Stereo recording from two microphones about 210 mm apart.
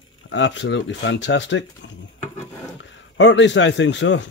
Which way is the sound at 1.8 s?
60° left (ahead or behind).